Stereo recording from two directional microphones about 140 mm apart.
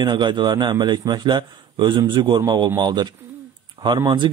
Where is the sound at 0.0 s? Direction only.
35° right (ahead or behind).